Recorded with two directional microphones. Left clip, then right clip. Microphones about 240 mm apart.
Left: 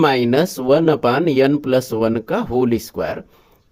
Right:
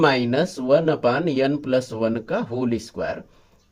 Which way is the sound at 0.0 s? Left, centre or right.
Left.